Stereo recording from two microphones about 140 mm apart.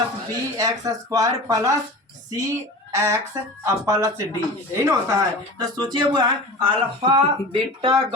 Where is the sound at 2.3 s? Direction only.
20° right (ahead or behind).